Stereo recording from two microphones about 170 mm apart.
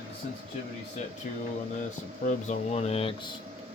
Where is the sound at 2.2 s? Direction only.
45° left (ahead or behind).